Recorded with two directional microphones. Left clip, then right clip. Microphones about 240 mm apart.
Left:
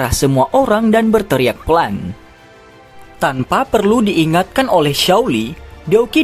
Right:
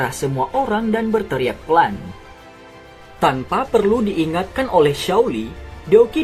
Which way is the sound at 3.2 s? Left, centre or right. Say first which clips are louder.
Left 2 dB; left.